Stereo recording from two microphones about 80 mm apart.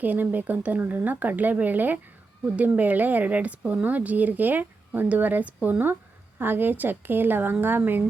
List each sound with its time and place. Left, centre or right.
0.0 s speech: right